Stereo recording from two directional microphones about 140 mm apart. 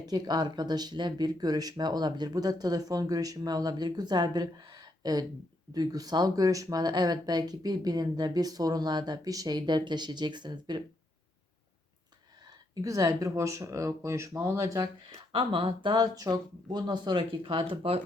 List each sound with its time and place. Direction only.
0.0 s speech: 30° right (ahead or behind)
12.8 s speech: 25° right (ahead or behind)
15.1 s speech: 40° right (ahead or behind)